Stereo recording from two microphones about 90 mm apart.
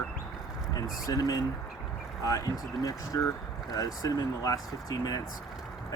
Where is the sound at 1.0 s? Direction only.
45° left (ahead or behind).